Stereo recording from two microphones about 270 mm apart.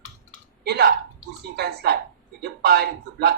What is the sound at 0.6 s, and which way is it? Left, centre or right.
A man's voice, right.